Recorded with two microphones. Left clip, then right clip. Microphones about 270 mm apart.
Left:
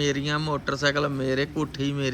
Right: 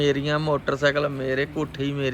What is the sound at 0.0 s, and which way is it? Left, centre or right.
Speech, centre.